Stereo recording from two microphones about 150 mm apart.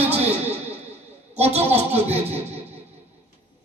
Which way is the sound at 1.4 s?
45° right (ahead or behind).